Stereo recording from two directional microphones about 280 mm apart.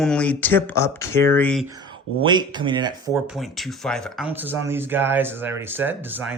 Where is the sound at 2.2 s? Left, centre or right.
Centre.